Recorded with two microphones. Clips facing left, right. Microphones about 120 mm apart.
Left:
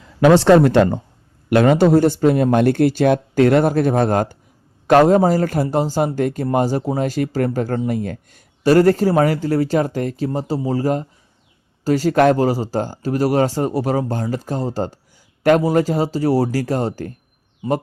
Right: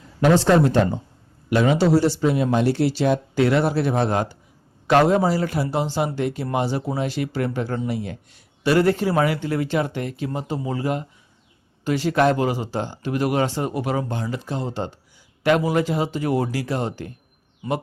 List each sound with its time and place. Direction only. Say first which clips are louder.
0.3 s a man's voice: left 5 dB; 70° left (ahead or behind); by 17.2 s 40° left (ahead or behind)
17.6 s speech: left 5 dB; 25° left (ahead or behind)